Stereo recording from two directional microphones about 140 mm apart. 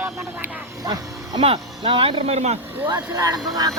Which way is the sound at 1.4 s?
45° right (ahead or behind).